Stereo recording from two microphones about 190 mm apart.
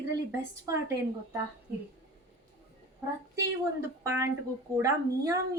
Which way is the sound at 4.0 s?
15° right (ahead or behind).